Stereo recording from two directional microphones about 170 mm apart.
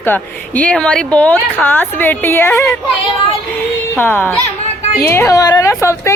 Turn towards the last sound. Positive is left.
turn(degrees=15)  # may be behind; listen again after turning